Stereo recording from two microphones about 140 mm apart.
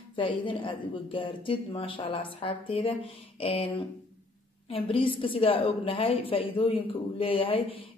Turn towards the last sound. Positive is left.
turn(degrees=40)  # may be behind; listen again after turning